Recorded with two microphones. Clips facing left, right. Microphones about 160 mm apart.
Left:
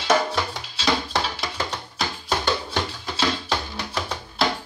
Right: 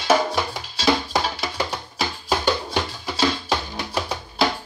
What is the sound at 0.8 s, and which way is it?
Music, 5° right (ahead or behind).